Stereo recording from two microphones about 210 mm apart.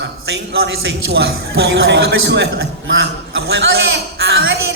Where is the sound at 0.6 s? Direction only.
55° right (ahead or behind).